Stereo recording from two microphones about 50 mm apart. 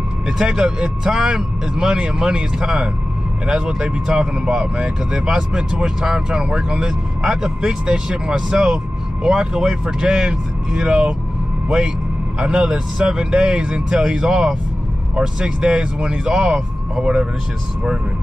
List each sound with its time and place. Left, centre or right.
0.4 s speech: centre
12.4 s speech: centre